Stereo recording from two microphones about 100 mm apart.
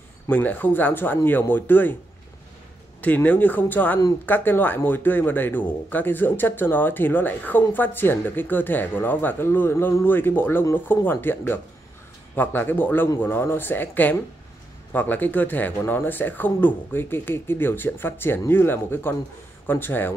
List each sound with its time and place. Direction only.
0.3 s speech: 15° left (ahead or behind)
3.0 s speech: 15° left (ahead or behind)